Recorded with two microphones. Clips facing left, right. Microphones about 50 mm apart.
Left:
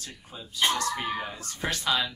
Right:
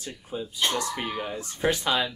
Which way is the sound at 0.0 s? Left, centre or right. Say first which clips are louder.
Right 9 dB; centre.